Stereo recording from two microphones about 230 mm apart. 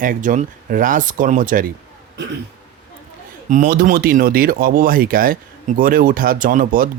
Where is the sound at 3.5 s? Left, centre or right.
Right.